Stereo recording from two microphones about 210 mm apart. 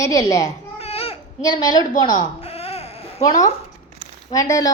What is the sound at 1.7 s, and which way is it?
Baby cry, 20° left (ahead or behind).